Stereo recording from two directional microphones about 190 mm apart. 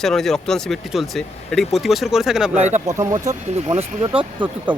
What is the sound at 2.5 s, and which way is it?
Speech, 35° right (ahead or behind).